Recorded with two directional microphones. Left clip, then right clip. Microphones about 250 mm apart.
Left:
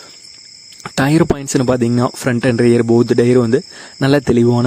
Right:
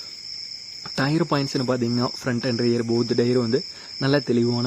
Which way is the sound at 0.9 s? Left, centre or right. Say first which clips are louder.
Left 8 dB; left.